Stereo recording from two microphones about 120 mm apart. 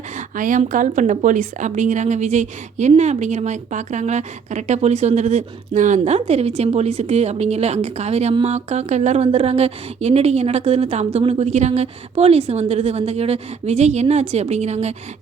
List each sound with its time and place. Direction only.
0.3 s a woman's voice: 90° right; by 14.9 s 65° right (ahead or behind)